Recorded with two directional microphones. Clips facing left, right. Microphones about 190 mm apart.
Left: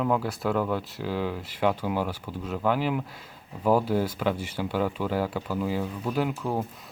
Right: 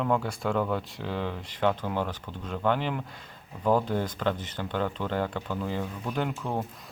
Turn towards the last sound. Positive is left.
turn(degrees=5)  # may be behind; listen again after turning